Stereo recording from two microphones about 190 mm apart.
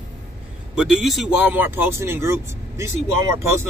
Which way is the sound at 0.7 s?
Centre (ahead or behind).